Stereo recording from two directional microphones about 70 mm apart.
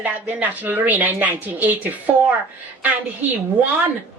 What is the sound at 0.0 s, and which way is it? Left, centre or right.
A woman's voice, right.